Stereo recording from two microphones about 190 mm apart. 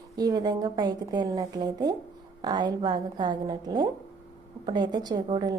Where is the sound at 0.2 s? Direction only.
20° right (ahead or behind).